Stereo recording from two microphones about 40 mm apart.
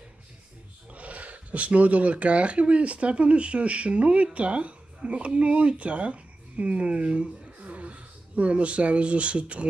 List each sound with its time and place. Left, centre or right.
0.9 s speech: right